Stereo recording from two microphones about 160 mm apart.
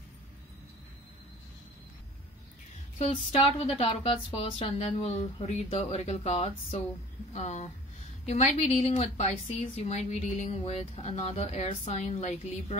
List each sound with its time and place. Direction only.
3.0 s a woman's voice: 40° left (ahead or behind)